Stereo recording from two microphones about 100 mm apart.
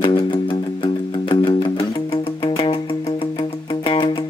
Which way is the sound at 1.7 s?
65° left (ahead or behind).